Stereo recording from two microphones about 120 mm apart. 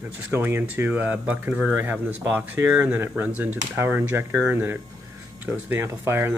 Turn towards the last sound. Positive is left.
turn(degrees=-20)  # may be behind; listen again after turning